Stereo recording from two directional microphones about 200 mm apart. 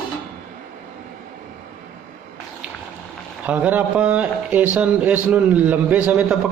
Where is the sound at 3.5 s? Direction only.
10° right (ahead or behind).